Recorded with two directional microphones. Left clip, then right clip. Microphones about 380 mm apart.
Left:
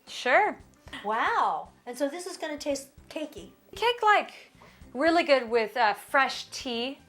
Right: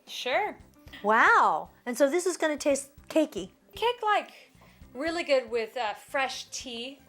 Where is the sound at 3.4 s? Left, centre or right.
Right.